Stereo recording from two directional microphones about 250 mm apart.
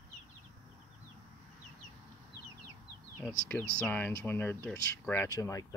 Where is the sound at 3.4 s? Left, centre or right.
Centre.